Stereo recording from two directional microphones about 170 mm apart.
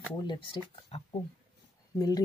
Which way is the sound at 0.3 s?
30° left (ahead or behind).